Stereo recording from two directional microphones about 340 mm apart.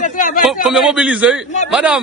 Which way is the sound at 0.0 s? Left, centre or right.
Left.